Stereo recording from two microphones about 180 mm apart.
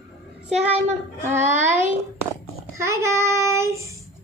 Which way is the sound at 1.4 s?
40° right (ahead or behind).